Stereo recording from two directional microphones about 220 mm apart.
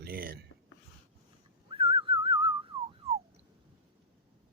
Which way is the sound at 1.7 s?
25° right (ahead or behind).